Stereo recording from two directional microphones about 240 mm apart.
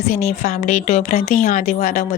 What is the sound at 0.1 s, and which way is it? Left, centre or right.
Speech, left.